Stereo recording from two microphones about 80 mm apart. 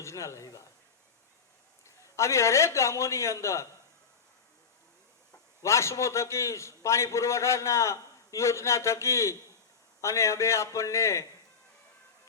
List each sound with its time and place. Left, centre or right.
0.0 s a man's voice: left
2.1 s a man's voice: left
5.6 s a man's voice: left